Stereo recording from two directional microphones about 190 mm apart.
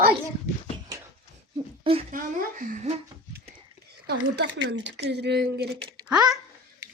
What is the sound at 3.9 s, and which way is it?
Speech, 60° right (ahead or behind).